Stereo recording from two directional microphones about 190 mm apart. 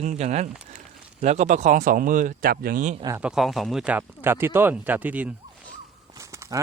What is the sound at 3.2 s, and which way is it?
Speech, 5° right (ahead or behind).